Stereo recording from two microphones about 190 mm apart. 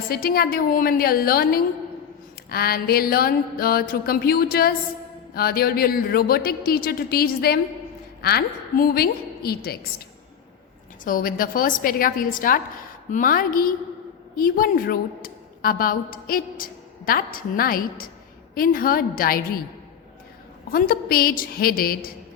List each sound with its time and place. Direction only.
0.1 s a woman's voice: 50° left (ahead or behind)
11.0 s a woman's voice: 45° left (ahead or behind)
20.7 s speech: 50° left (ahead or behind)